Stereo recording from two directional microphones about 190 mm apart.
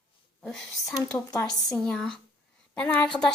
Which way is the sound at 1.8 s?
Centre (ahead or behind).